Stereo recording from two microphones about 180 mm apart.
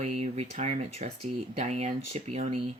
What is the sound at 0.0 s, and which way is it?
Speech, 40° right (ahead or behind).